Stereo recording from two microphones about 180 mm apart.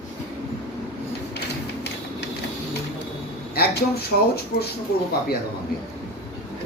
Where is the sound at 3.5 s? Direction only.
60° left (ahead or behind).